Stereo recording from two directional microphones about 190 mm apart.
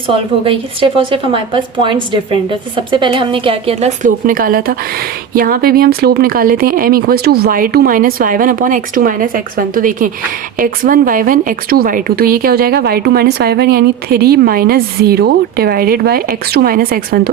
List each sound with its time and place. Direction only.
0.4 s a woman's voice: 30° right (ahead or behind); by 17.2 s 50° right (ahead or behind)